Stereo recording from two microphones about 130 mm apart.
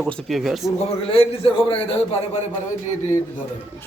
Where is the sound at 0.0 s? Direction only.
5° left (ahead or behind).